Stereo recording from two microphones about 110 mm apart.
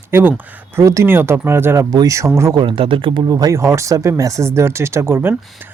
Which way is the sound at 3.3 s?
30° right (ahead or behind).